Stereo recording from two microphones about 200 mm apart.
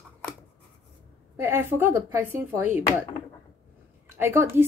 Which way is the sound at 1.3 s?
10° right (ahead or behind).